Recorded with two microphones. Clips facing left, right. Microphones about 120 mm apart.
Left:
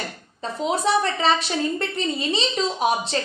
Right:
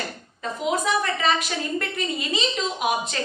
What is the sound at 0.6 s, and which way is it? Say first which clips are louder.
A woman's voice: left 3 dB; 30° left (ahead or behind).